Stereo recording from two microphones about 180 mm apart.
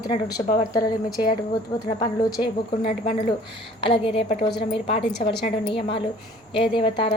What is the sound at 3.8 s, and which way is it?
A woman's voice, 30° left (ahead or behind).